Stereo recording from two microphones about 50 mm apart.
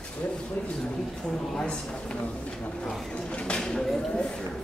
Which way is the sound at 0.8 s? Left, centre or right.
Centre.